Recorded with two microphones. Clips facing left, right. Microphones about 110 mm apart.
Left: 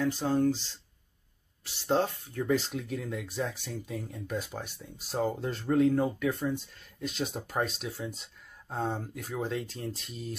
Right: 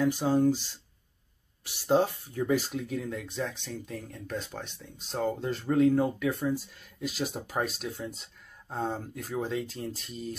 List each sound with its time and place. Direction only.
0.0 s speech: 15° right (ahead or behind)